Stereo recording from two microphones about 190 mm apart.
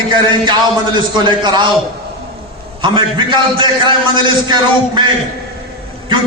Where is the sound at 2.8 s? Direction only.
25° right (ahead or behind).